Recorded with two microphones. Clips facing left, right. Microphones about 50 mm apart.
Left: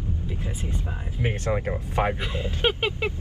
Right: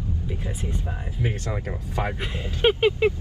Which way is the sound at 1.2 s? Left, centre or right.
Left.